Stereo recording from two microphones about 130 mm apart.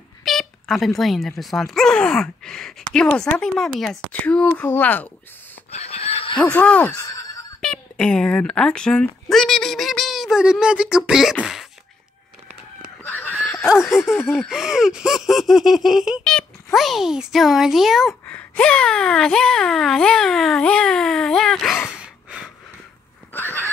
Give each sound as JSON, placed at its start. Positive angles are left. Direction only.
{"t": 0.2, "sound": "a sound", "side_deg": 0}
{"t": 1.4, "sound": "a child's voice", "side_deg": 0}
{"t": 5.7, "sound": "chicken", "side_deg": 55}
{"t": 6.4, "sound": "speech", "side_deg": 10}
{"t": 6.9, "sound": "a sound", "side_deg": 25}
{"t": 7.6, "sound": "speech", "side_deg": 5}
{"t": 13.0, "sound": "fowl", "side_deg": 15}
{"t": 13.8, "sound": "a child's voice", "side_deg": -5}
{"t": 23.3, "sound": "a sound", "side_deg": 15}